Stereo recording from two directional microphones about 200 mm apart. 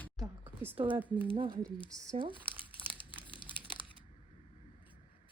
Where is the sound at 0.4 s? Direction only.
10° right (ahead or behind).